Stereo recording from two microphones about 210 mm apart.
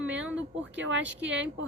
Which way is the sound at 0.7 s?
60° right (ahead or behind).